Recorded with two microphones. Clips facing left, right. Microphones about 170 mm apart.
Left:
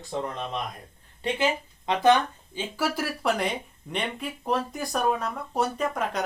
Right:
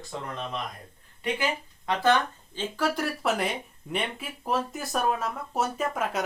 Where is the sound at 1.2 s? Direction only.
20° left (ahead or behind).